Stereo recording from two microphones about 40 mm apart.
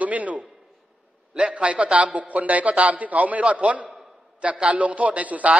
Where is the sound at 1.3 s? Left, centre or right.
Right.